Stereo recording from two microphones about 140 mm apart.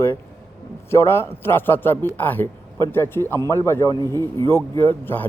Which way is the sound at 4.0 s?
25° right (ahead or behind).